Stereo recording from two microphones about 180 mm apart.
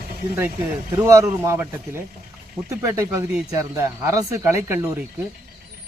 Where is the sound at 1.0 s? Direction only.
15° right (ahead or behind).